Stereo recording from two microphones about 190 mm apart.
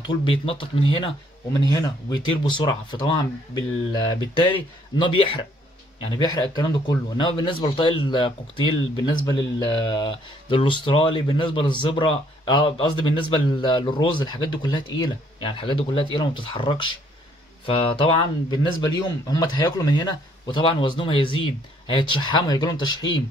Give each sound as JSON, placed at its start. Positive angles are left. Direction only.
{"t": 0.0, "sound": "a man's voice", "side_deg": 25}
{"t": 4.9, "sound": "a man's voice", "side_deg": 25}